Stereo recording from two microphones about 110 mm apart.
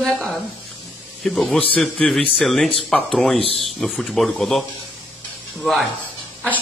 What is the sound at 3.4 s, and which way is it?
Speech, 60° left (ahead or behind).